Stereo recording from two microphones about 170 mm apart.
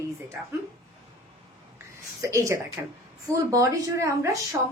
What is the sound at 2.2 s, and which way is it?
A woman's voice, 20° right (ahead or behind).